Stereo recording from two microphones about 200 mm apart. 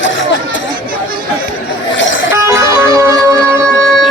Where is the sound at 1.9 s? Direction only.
70° left (ahead or behind).